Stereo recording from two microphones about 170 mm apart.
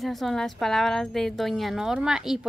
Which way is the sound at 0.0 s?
Centre (ahead or behind).